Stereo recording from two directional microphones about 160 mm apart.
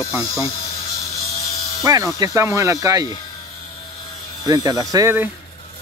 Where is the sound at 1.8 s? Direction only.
20° right (ahead or behind).